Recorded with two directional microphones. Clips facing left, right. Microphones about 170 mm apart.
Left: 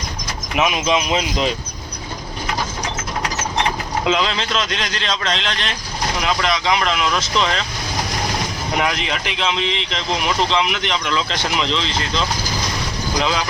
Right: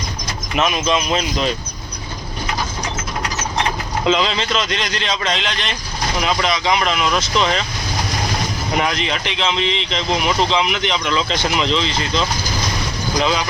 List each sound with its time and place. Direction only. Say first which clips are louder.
0.5 s speech: even; 10° left (ahead or behind)
4.0 s speech: right 3 dB; centre (ahead or behind)
8.8 s speech: even; centre (ahead or behind)